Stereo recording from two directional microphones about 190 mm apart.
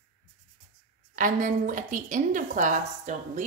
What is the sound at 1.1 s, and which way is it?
A woman's voice, 45° right (ahead or behind).